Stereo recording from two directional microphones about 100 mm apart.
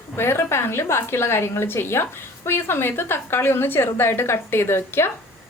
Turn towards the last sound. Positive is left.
turn(degrees=25)  # may be behind; listen again after turning